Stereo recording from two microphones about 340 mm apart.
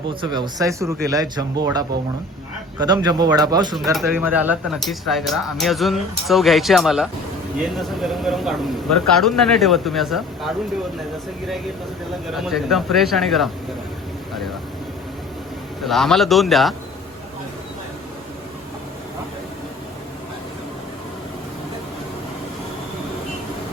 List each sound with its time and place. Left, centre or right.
0.2 s speech: centre
2.8 s speech: centre
3.8 s speech: centre
12.3 s speech: centre
15.8 s speech: centre